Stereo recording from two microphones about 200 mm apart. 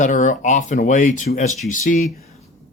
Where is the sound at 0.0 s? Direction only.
40° left (ahead or behind).